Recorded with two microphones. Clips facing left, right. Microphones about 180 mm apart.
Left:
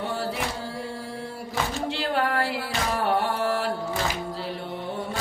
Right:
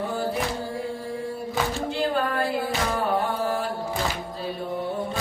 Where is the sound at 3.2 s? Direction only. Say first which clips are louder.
Even; 75° left (ahead or behind).